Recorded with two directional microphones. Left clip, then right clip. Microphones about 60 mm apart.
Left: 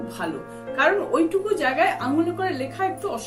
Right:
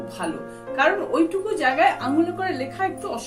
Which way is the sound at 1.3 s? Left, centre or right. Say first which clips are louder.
Even; left.